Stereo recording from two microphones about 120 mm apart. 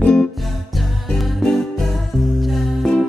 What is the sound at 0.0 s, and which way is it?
Music, 5° left (ahead or behind).